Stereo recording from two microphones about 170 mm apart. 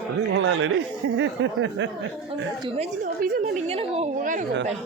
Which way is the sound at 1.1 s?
90° right.